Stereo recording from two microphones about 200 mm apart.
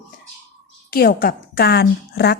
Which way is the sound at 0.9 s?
50° left (ahead or behind).